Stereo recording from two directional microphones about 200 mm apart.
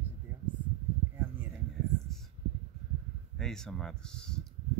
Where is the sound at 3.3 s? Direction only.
5° left (ahead or behind).